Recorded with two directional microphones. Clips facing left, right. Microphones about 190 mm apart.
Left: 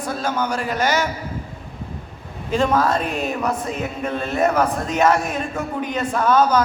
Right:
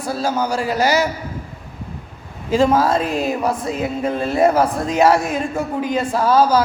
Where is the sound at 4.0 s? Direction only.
30° right (ahead or behind).